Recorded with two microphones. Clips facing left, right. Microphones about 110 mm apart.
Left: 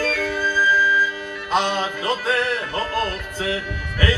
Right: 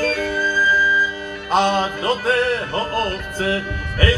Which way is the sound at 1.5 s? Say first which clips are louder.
Right 4 dB; 45° right (ahead or behind).